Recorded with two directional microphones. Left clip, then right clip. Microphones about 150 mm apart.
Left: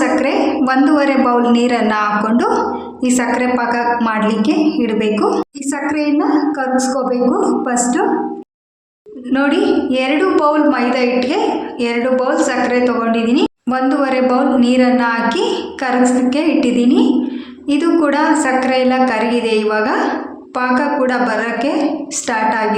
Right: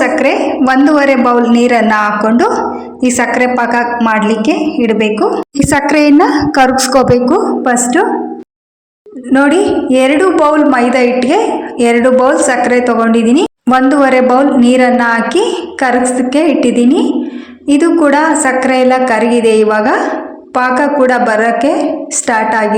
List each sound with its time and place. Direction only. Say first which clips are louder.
0.0 s a woman's voice: right 4 dB; 30° right (ahead or behind)
5.5 s a woman's voice: right 9 dB; 60° right (ahead or behind); by 8.0 s 35° right (ahead or behind)
9.3 s a woman's voice: right 5 dB; 45° right (ahead or behind)